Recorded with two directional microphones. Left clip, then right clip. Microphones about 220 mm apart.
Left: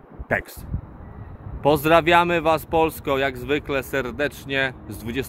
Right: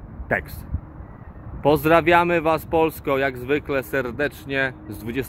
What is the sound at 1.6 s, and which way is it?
Speech, 10° right (ahead or behind).